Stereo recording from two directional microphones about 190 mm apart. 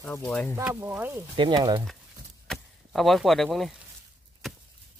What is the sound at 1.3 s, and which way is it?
Speech, 25° right (ahead or behind).